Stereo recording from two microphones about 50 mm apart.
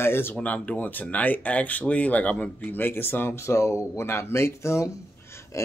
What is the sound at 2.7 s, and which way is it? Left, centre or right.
Speech, left.